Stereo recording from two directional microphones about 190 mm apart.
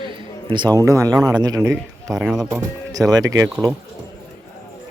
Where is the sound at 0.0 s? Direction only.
25° right (ahead or behind).